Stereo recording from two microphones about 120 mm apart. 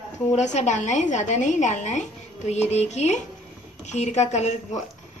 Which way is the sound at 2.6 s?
65° left (ahead or behind).